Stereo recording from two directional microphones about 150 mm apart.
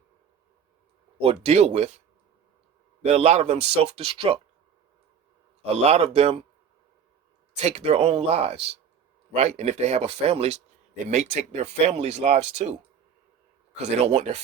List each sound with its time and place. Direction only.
1.2 s speech: 40° right (ahead or behind)
3.0 s speech: 50° right (ahead or behind)
5.6 s speech: 45° right (ahead or behind)
7.5 s speech: 45° right (ahead or behind)
13.7 s speech: 45° right (ahead or behind)